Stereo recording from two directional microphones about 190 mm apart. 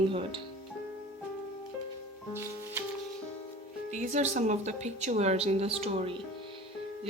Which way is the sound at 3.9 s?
40° right (ahead or behind).